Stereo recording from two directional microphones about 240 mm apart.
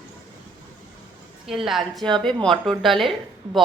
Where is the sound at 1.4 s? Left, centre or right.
Centre.